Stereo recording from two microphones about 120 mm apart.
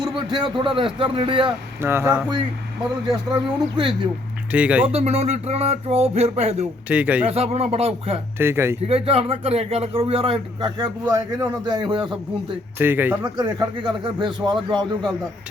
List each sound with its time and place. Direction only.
0.0 s a man's voice: 40° right (ahead or behind)
1.8 s speech: 20° right (ahead or behind)
3.3 s a man's voice: 40° right (ahead or behind)
4.5 s a man's voice: 10° right (ahead or behind)
4.9 s speech: 60° right (ahead or behind)
6.8 s a man's voice: 10° right (ahead or behind)
7.3 s speech: 60° right (ahead or behind)
8.4 s speech: 20° right (ahead or behind)
8.9 s speech: 55° right (ahead or behind)
10.8 s a man's voice: 30° right (ahead or behind)
12.8 s a man's voice: 15° right (ahead or behind)
13.2 s a man's voice: 35° right (ahead or behind)